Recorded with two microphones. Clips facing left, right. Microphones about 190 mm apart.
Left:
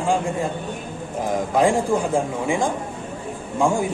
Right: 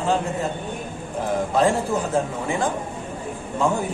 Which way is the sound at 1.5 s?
10° left (ahead or behind).